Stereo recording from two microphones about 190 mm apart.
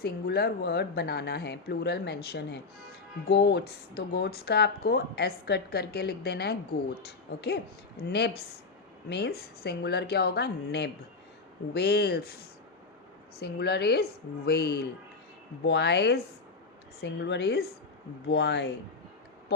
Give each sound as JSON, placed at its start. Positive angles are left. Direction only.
{"t": 0.0, "sound": "speech", "side_deg": 55}